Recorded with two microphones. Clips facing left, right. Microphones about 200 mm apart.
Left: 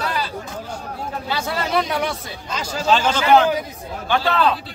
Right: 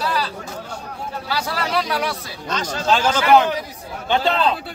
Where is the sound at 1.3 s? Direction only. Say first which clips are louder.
Left 1 dB; 25° left (ahead or behind).